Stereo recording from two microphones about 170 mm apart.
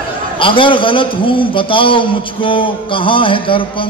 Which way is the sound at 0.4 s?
30° left (ahead or behind).